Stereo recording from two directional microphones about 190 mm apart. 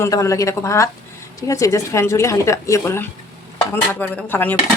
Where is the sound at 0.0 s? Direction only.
15° left (ahead or behind).